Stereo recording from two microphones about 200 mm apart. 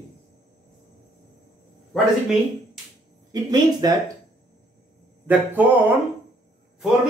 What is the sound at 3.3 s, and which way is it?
Speech, 20° right (ahead or behind).